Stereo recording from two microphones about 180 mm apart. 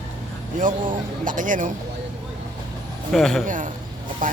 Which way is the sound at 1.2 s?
45° right (ahead or behind).